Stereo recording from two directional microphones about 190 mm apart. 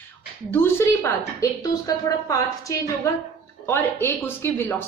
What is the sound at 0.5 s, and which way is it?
A woman's voice, 10° left (ahead or behind).